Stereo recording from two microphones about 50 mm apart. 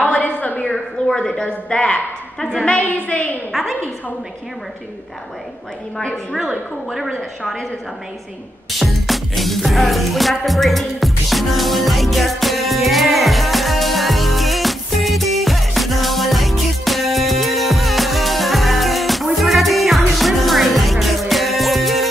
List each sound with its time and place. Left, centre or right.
0.0 s a sound: left
1.0 s a man's voice: centre
3.5 s a woman's voice: centre
8.7 s music: centre